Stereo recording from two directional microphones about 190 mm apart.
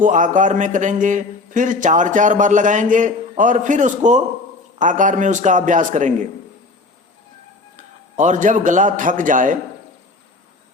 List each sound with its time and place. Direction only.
0.0 s a man's voice: 40° right (ahead or behind)
7.8 s a man's voice: 40° right (ahead or behind)